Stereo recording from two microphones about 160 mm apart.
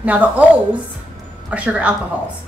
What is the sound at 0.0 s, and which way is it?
Speech, 10° right (ahead or behind).